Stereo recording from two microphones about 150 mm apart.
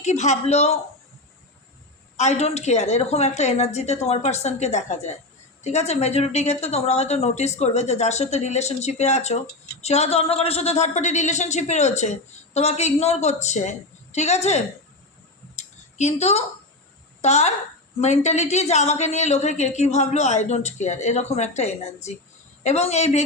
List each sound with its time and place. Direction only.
0.0 s a woman's voice: 50° left (ahead or behind)
2.1 s a woman's voice: 50° left (ahead or behind)
16.0 s a woman's voice: 45° left (ahead or behind)